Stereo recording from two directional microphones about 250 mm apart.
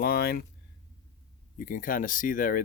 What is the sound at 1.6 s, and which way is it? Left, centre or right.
Speech, left.